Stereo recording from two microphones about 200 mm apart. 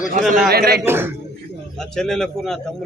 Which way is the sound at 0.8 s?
10° right (ahead or behind).